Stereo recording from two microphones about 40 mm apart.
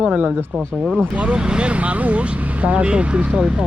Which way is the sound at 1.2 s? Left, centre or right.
Right.